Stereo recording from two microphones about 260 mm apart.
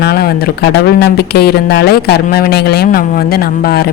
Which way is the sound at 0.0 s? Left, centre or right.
Left.